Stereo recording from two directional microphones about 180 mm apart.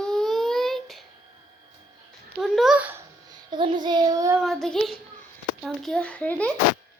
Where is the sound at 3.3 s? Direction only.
25° right (ahead or behind).